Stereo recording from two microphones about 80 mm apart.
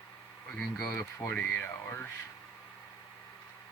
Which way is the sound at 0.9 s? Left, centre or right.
Left.